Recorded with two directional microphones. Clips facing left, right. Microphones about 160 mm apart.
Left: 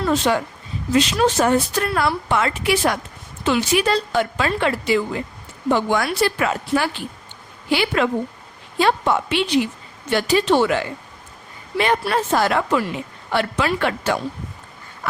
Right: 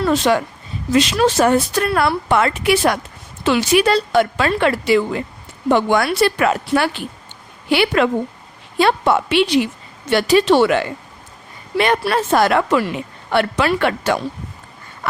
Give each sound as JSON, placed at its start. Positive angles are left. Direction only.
{"t": 0.3, "sound": "speech", "side_deg": -70}
{"t": 0.9, "sound": "speech", "side_deg": -90}
{"t": 3.4, "sound": "speech", "side_deg": -80}